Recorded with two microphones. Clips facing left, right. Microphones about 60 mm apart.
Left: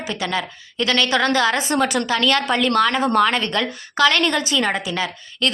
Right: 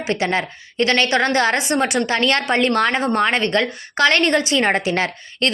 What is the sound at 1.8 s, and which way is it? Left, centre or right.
A woman's voice, right.